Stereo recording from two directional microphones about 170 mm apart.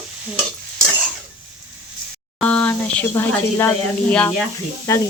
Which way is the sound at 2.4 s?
5° left (ahead or behind).